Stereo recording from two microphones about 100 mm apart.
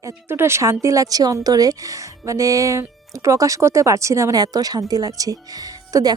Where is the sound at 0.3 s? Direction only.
25° right (ahead or behind).